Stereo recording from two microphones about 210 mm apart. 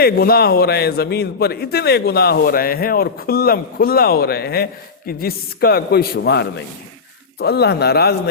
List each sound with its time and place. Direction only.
0.0 s a man's voice: 50° left (ahead or behind)